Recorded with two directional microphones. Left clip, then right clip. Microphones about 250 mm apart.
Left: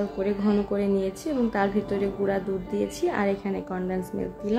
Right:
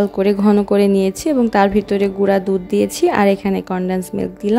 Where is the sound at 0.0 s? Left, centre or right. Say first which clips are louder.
Right 11 dB; right.